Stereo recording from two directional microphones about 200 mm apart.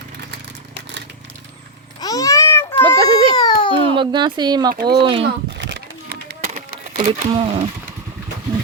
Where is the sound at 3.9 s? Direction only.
25° right (ahead or behind).